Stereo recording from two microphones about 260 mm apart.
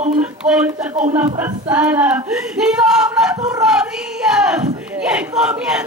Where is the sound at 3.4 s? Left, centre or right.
Centre.